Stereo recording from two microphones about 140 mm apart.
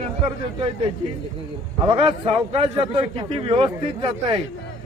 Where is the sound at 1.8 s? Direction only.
40° right (ahead or behind).